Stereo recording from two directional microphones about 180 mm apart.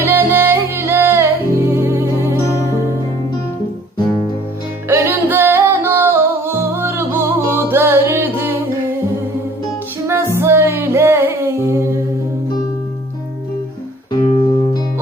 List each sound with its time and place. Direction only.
0.0 s music: 15° right (ahead or behind)
4.9 s music: 15° right (ahead or behind)
10.3 s music: 15° right (ahead or behind)
14.1 s music: 25° left (ahead or behind)